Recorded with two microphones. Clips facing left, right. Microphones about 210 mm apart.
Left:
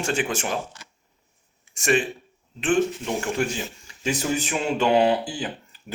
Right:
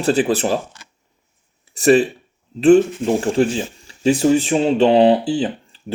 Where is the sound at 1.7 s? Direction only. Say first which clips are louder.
Right 9 dB; 35° right (ahead or behind).